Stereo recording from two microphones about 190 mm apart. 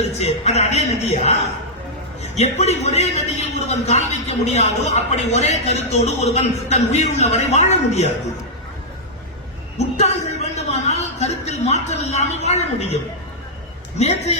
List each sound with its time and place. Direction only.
0.0 s a man's voice: 35° left (ahead or behind)
9.7 s a sound: 35° left (ahead or behind)
14.0 s a man's voice: 35° left (ahead or behind)